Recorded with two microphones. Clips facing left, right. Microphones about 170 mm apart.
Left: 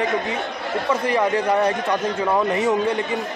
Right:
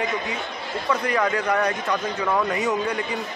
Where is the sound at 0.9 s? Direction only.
25° left (ahead or behind).